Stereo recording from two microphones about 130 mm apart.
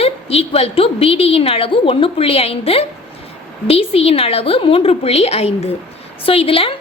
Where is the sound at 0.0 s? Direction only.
50° left (ahead or behind).